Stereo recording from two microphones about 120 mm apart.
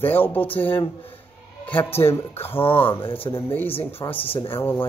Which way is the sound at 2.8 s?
45° left (ahead or behind).